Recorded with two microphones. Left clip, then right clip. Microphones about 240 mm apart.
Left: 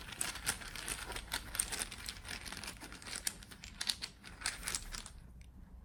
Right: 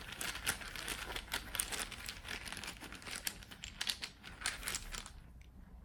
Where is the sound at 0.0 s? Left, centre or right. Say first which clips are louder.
Right 1 dB; centre.